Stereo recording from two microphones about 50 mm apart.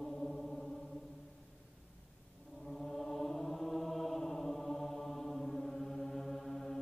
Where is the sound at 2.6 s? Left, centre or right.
Centre.